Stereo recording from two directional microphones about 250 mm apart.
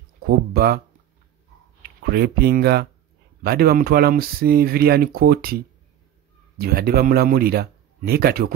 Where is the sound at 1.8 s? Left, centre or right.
Right.